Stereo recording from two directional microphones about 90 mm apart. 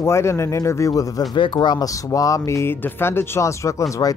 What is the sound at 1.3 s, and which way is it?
Speech, 60° left (ahead or behind).